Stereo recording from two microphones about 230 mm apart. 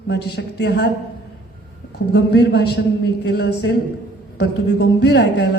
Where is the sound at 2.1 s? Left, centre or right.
Left.